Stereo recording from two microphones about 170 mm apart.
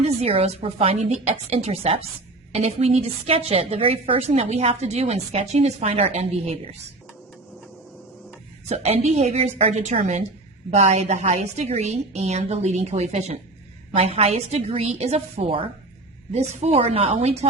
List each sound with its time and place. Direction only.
0.0 s a woman's voice: 40° right (ahead or behind)
8.7 s a woman's voice: 40° right (ahead or behind)